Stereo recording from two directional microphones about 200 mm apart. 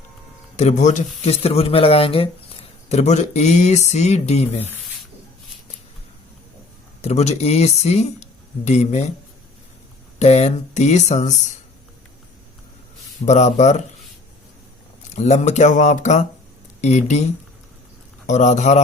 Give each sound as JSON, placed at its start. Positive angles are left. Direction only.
{"t": 0.5, "sound": "speech", "side_deg": 35}
{"t": 7.0, "sound": "speech", "side_deg": 30}
{"t": 10.2, "sound": "speech", "side_deg": 35}
{"t": 13.2, "sound": "speech", "side_deg": 35}
{"t": 15.1, "sound": "speech", "side_deg": 35}